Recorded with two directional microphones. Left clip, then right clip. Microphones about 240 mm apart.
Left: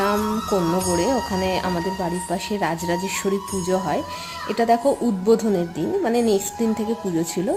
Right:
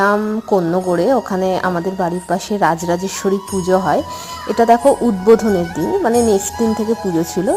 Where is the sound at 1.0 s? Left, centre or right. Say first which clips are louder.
Right 7 dB; centre.